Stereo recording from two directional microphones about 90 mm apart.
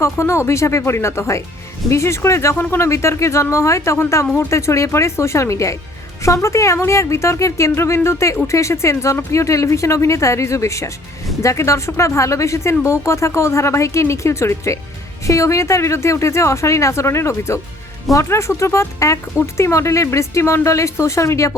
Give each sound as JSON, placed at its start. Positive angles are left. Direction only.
{"t": 0.0, "sound": "speech", "side_deg": 30}